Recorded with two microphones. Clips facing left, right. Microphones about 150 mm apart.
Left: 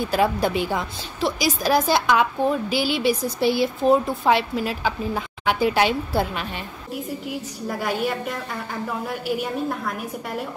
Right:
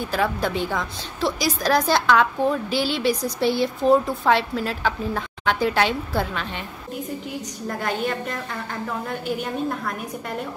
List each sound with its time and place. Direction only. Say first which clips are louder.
0.0 s a woman's voice: left 3 dB; 15° left (ahead or behind)
7.6 s a woman's voice: left 1 dB; 5° left (ahead or behind)